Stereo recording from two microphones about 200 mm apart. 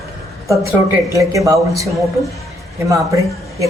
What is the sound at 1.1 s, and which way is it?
A man's voice, 15° right (ahead or behind).